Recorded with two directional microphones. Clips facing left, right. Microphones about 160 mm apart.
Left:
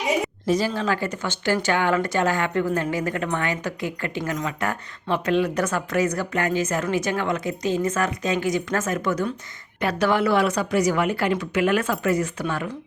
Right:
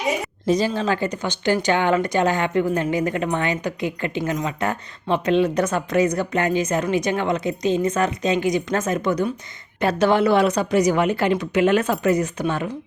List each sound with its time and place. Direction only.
0.4 s a woman's voice: 20° right (ahead or behind)